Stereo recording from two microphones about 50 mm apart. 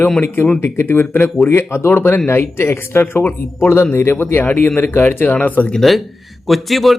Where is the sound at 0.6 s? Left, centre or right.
Left.